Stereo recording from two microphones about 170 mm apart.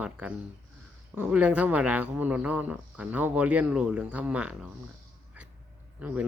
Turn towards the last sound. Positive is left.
turn(degrees=-5)  # may be behind; listen again after turning